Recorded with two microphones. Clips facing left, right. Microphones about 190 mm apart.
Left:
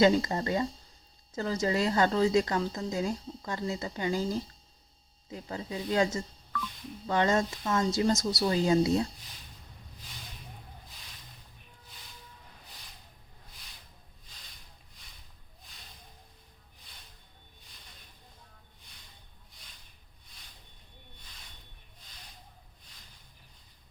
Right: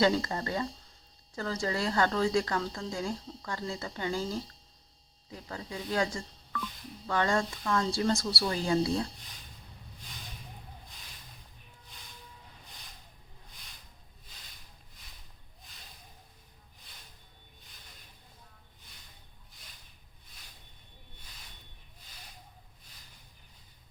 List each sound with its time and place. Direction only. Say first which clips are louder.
0.0 s a woman's voice: left 3 dB; 20° left (ahead or behind)